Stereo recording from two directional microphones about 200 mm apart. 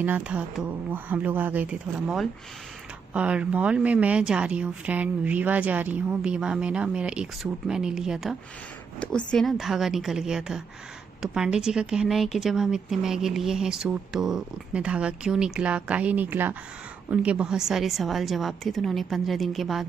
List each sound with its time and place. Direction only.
0.0 s speech: 5° right (ahead or behind)